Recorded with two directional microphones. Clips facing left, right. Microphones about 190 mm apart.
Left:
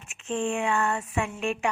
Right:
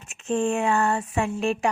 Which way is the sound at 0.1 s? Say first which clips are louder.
Right 4 dB; 40° right (ahead or behind).